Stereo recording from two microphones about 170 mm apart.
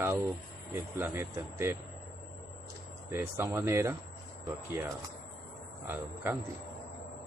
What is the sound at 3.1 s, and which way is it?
Speech, 15° right (ahead or behind).